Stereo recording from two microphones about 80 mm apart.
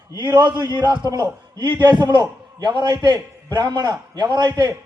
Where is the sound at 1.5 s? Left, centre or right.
Right.